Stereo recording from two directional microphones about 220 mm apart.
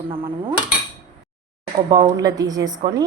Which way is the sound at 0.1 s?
25° right (ahead or behind).